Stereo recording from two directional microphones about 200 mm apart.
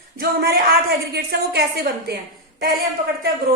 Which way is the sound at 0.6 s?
55° right (ahead or behind).